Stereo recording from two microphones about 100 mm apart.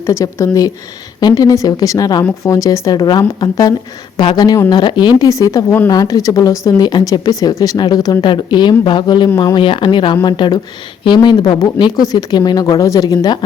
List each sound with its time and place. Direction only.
0.0 s speech: 30° left (ahead or behind); by 5.3 s 45° left (ahead or behind)
5.3 s speech: 35° left (ahead or behind)
8.2 s speech: 50° left (ahead or behind)
9.6 s speech: 55° left (ahead or behind); by 13.4 s 40° left (ahead or behind)